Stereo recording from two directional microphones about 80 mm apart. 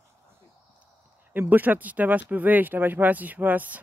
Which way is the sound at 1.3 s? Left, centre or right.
Right.